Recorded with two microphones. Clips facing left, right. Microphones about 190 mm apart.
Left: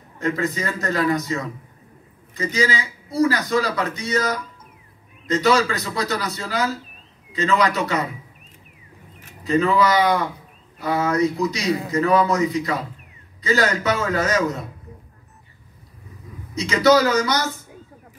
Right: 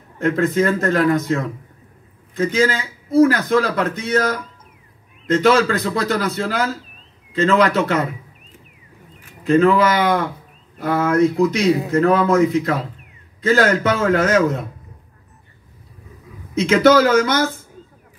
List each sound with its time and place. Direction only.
0.2 s a man's voice: 55° right (ahead or behind)
9.5 s a man's voice: 55° right (ahead or behind)
16.5 s a man's voice: 55° right (ahead or behind)